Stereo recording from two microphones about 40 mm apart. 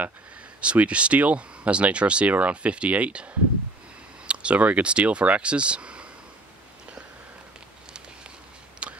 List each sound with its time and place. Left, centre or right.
0.6 s speech: right
4.3 s speech: right
8.8 s a sound: right